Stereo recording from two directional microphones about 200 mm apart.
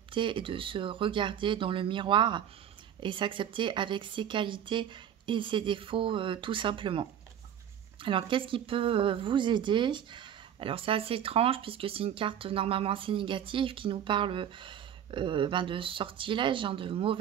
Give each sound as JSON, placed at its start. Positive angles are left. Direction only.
{"t": 0.1, "sound": "speech", "side_deg": -25}